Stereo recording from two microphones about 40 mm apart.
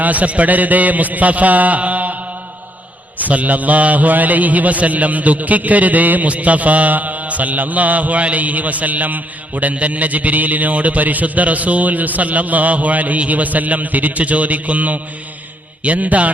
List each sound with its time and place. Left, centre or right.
0.0 s a man's voice: right
3.2 s a man's voice: right